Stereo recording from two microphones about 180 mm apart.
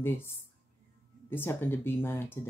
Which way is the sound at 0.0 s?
15° left (ahead or behind).